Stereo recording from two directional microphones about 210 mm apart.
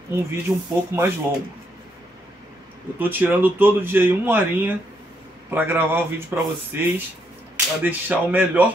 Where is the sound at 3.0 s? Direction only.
10° right (ahead or behind).